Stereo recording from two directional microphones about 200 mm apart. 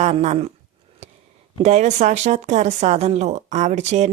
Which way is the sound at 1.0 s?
35° right (ahead or behind).